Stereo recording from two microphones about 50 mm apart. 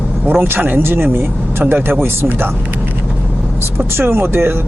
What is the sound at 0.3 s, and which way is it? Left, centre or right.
Speech, right.